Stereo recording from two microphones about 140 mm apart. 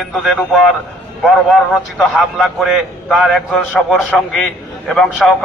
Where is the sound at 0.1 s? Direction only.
5° left (ahead or behind).